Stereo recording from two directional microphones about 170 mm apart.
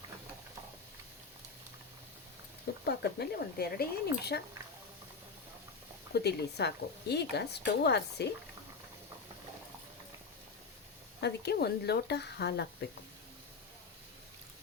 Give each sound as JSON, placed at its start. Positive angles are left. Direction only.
{"t": 2.8, "sound": "speech", "side_deg": 75}
{"t": 6.1, "sound": "speech", "side_deg": 75}
{"t": 11.2, "sound": "speech", "side_deg": 70}